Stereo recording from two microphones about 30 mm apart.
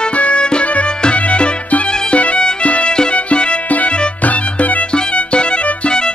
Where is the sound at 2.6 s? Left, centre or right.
Left.